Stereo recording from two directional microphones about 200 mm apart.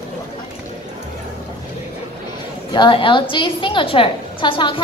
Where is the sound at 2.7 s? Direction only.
25° left (ahead or behind).